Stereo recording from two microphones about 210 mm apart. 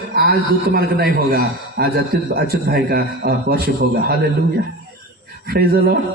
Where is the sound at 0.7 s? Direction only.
50° right (ahead or behind).